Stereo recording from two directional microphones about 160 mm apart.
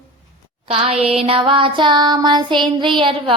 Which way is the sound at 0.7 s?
35° right (ahead or behind).